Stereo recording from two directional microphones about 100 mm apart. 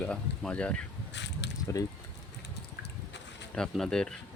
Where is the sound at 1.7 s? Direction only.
30° left (ahead or behind).